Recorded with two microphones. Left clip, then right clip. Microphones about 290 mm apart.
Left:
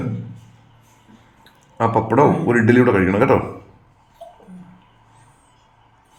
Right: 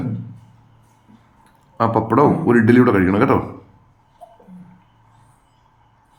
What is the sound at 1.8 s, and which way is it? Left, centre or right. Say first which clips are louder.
Speech: even; centre.